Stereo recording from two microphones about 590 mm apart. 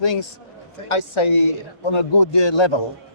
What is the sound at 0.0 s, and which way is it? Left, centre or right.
A man's voice, left.